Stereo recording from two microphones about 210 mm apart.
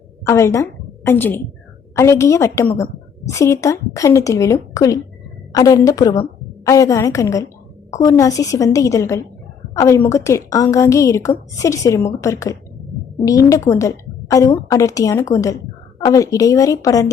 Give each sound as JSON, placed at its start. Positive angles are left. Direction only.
{"t": 0.3, "sound": "a woman's voice", "side_deg": 15}